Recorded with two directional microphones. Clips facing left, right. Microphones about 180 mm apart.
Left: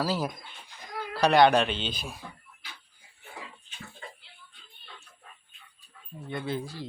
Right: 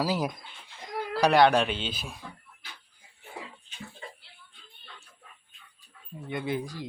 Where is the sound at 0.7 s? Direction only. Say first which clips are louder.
Right 4 dB; 25° right (ahead or behind).